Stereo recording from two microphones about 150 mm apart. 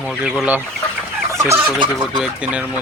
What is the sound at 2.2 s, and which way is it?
Speech, 10° right (ahead or behind).